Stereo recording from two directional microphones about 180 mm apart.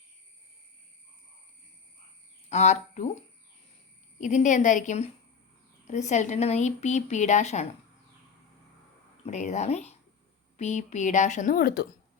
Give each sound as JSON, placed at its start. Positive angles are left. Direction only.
{"t": 2.5, "sound": "speech", "side_deg": 40}
{"t": 4.2, "sound": "speech", "side_deg": 45}
{"t": 9.2, "sound": "speech", "side_deg": 40}